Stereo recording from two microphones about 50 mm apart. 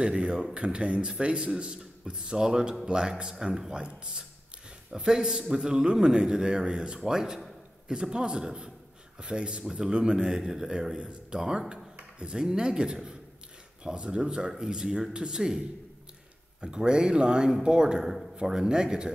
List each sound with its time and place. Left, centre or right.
0.0 s a man's voice: centre
16.6 s a man's voice: centre